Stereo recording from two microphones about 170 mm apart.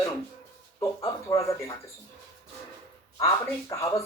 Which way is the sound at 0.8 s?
20° left (ahead or behind).